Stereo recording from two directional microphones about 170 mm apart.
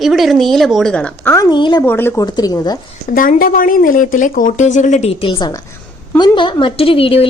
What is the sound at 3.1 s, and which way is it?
Speech, 55° left (ahead or behind).